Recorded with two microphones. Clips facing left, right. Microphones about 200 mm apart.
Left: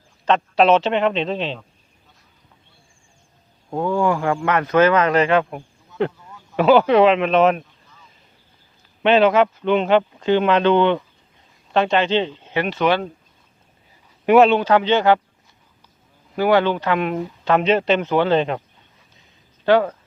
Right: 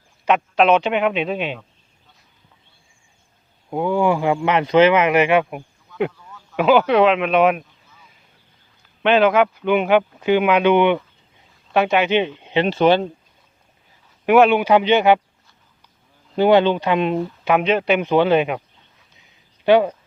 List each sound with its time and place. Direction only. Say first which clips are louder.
0.3 s speech: even; 10° right (ahead or behind)
3.7 s speech: right 1 dB; 15° right (ahead or behind)
9.0 s speech: even; centre (ahead or behind); by 12.6 s 15° right (ahead or behind)
12.6 s speech: right 4 dB; 30° right (ahead or behind)
14.3 s speech: left 1 dB; centre (ahead or behind)
14.5 s speech: right 1 dB; 15° right (ahead or behind)
16.3 s speech: right 3 dB; 25° right (ahead or behind)
17.4 s speech: left 1 dB; 10° right (ahead or behind)
18.0 s speech: right 2 dB; 15° right (ahead or behind)
19.6 s speech: right 2 dB; 15° right (ahead or behind)